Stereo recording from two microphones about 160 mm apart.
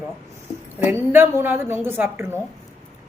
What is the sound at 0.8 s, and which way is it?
A woman's voice, 15° right (ahead or behind).